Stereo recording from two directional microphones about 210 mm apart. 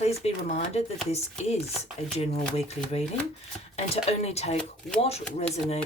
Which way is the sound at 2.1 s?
30° left (ahead or behind).